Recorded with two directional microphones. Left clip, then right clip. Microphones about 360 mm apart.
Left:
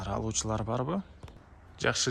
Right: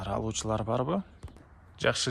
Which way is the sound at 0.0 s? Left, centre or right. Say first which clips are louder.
Right 1 dB; centre.